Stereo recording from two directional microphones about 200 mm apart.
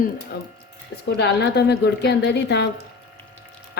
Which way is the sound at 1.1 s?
55° left (ahead or behind).